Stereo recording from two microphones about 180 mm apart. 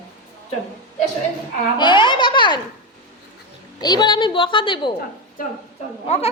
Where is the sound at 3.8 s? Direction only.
25° left (ahead or behind).